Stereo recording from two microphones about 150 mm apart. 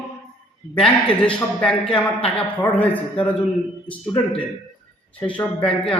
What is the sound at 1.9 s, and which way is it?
Speech, 40° left (ahead or behind).